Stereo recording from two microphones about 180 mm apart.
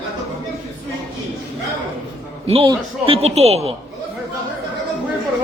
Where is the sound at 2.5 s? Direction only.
30° right (ahead or behind).